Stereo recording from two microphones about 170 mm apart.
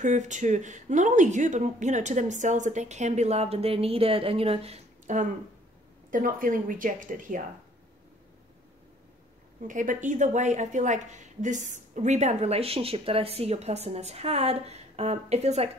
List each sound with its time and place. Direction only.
0.0 s speech: 45° right (ahead or behind)
9.7 s a woman's voice: 50° right (ahead or behind)